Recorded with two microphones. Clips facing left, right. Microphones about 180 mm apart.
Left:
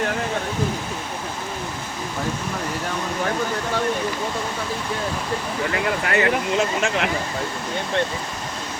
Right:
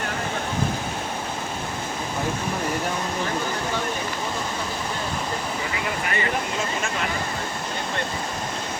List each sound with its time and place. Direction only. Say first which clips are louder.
5.7 s speech: left 8 dB; 70° left (ahead or behind)